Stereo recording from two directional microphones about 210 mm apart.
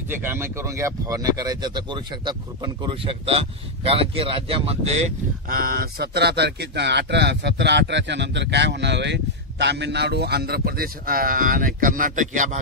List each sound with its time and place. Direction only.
0.1 s speech: 10° right (ahead or behind); by 12.5 s 35° right (ahead or behind)